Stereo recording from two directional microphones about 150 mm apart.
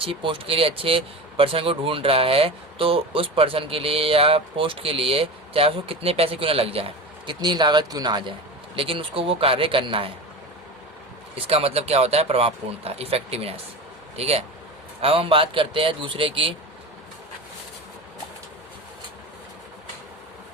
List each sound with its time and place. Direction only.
0.0 s speech: 35° right (ahead or behind)
11.4 s speech: 40° right (ahead or behind)